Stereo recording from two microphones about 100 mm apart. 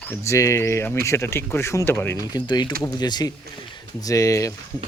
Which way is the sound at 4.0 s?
35° left (ahead or behind).